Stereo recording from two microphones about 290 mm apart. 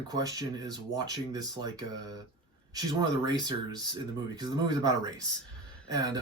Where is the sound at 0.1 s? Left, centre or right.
Centre.